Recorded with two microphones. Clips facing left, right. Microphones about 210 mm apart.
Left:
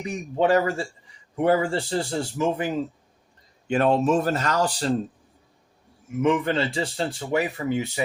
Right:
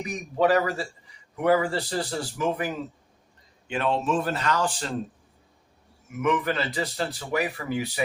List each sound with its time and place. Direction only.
0.3 s speech: 25° left (ahead or behind)
3.7 s speech: 45° left (ahead or behind)
6.1 s speech: 30° left (ahead or behind)